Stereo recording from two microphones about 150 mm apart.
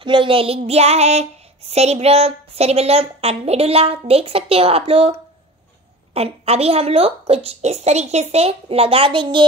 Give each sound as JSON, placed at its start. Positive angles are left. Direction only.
{"t": 0.0, "sound": "a woman's voice", "side_deg": -35}
{"t": 6.1, "sound": "a woman's voice", "side_deg": -45}